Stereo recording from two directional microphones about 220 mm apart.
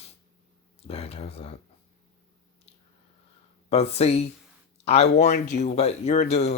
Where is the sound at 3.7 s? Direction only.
30° left (ahead or behind).